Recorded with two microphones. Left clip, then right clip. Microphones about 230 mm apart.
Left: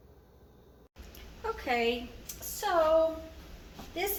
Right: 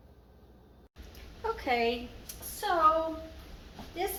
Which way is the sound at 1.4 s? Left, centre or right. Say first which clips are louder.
Right 1 dB; centre.